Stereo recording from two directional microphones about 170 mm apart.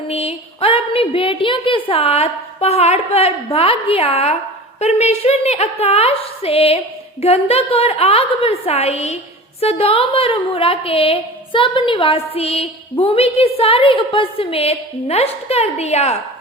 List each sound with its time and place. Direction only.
0.1 s a woman's voice: 35° left (ahead or behind)